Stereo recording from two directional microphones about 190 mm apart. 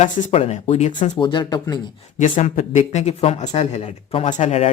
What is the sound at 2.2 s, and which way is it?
Speech, 40° left (ahead or behind).